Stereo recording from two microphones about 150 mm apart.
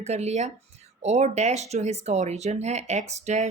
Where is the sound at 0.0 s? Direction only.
45° right (ahead or behind).